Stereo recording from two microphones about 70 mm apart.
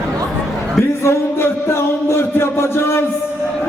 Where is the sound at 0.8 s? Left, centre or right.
Left.